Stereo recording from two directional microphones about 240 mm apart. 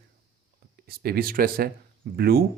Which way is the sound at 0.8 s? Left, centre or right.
Right.